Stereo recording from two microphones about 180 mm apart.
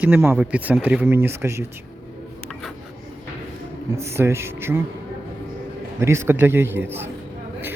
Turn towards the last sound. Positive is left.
turn(degrees=-10)  # may be behind; listen again after turning